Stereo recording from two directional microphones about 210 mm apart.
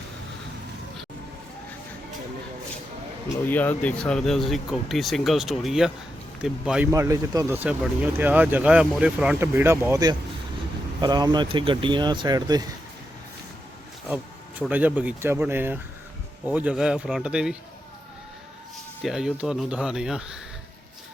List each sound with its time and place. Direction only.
3.5 s speech: 10° left (ahead or behind); by 12.6 s 20° right (ahead or behind)
14.6 s speech: 10° right (ahead or behind)
19.0 s speech: 5° right (ahead or behind)